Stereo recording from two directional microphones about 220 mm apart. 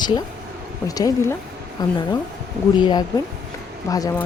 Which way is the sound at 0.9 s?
15° left (ahead or behind).